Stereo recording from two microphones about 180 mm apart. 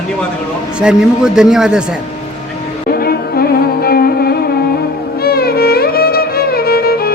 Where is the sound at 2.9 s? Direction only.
60° left (ahead or behind).